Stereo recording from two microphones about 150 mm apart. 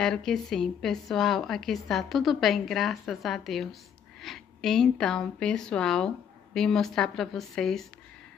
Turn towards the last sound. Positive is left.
turn(degrees=0)  # may be behind; listen again after turning